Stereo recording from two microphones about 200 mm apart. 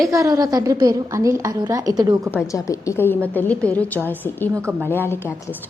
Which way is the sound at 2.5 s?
15° left (ahead or behind).